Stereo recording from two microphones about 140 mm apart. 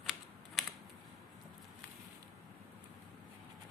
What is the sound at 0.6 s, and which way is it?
Camera, centre (ahead or behind).